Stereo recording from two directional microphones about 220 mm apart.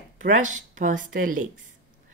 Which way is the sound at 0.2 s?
35° right (ahead or behind).